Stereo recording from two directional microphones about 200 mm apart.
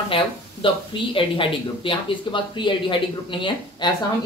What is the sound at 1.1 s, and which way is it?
Speech, 25° left (ahead or behind).